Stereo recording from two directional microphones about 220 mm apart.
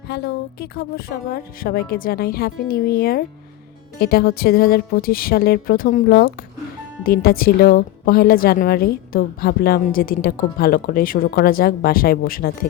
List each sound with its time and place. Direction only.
0.1 s a woman's voice: 45° left (ahead or behind)